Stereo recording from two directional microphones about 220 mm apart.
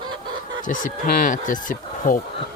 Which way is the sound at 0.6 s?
35° left (ahead or behind).